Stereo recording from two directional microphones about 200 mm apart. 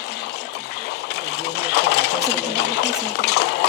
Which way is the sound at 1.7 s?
55° left (ahead or behind).